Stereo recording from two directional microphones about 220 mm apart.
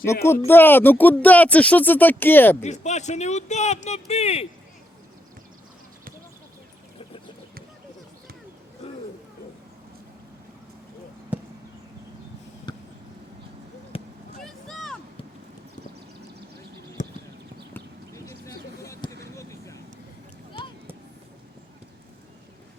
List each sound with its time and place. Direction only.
0.0 s speech: 10° left (ahead or behind)
2.6 s speech: 30° left (ahead or behind)
8.8 s hoot: 25° left (ahead or behind)
11.3 s chop: 5° right (ahead or behind)
12.7 s vehicle: 20° left (ahead or behind)
13.9 s vehicle: 25° left (ahead or behind)
14.4 s vehicle: centre (ahead or behind)
17.0 s clip-clop: 35° left (ahead or behind)
17.7 s a sound: 15° left (ahead or behind)